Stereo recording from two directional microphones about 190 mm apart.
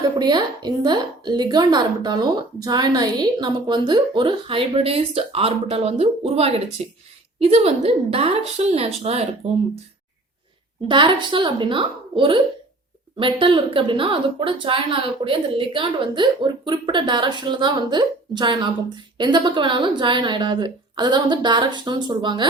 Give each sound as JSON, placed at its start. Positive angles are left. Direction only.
{"t": 0.2, "sound": "a woman's voice", "side_deg": -20}
{"t": 10.8, "sound": "a woman's voice", "side_deg": -25}